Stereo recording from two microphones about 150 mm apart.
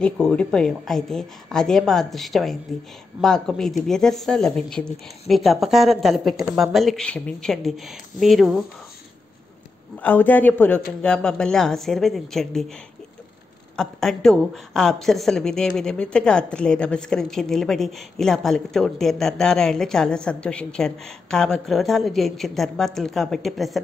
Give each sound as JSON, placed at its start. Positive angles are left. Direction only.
{"t": 0.0, "sound": "speech", "side_deg": 5}
{"t": 10.0, "sound": "a man's voice", "side_deg": 10}
{"t": 13.7, "sound": "speech", "side_deg": 5}